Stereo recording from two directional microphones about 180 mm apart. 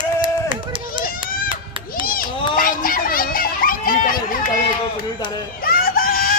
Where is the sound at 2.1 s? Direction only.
55° left (ahead or behind).